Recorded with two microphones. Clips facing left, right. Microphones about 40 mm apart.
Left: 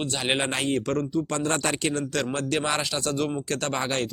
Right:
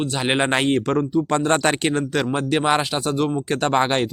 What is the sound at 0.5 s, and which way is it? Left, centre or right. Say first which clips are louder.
Speech: right 6 dB; right.